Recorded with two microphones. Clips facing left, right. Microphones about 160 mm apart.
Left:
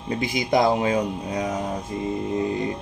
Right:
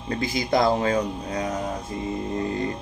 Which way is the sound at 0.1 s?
15° left (ahead or behind).